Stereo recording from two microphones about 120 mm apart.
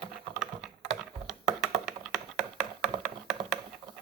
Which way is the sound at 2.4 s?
70° right (ahead or behind).